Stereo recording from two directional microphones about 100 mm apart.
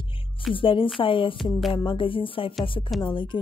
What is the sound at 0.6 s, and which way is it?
Speech, 60° left (ahead or behind).